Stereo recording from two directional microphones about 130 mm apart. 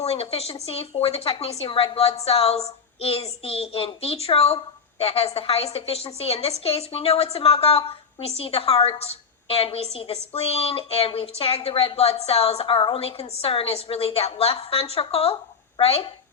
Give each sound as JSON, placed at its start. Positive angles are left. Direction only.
{"t": 0.0, "sound": "a woman's voice", "side_deg": 50}